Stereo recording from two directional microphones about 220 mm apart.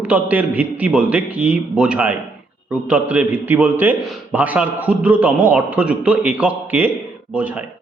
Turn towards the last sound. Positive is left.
turn(degrees=-5)  # may be behind; listen again after turning